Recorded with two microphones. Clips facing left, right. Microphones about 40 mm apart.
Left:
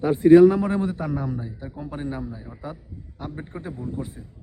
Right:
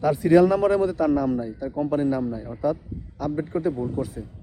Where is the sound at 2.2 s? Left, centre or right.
Centre.